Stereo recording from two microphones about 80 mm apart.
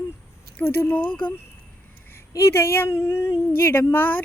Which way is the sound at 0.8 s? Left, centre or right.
Left.